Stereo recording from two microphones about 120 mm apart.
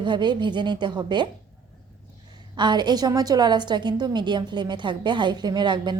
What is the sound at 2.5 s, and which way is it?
A woman's voice, 40° right (ahead or behind).